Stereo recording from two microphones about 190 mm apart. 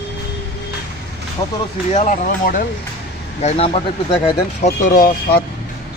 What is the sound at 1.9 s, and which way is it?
Speech, 45° left (ahead or behind).